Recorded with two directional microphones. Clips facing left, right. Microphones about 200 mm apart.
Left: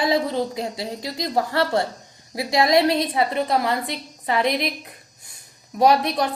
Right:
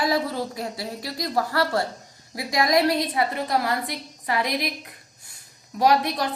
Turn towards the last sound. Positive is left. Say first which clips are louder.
# left 3 dB
turn(degrees=25)  # may be behind; listen again after turning